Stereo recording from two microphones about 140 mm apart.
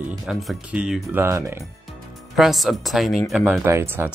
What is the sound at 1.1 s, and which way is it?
Speech, 20° right (ahead or behind).